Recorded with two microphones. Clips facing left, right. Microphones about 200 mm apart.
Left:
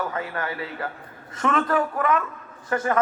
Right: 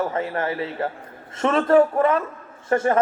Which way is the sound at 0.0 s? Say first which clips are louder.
Right 5 dB; 25° right (ahead or behind).